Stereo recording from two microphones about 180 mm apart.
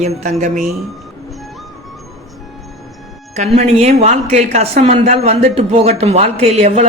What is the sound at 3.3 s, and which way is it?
A woman's voice, 40° right (ahead or behind).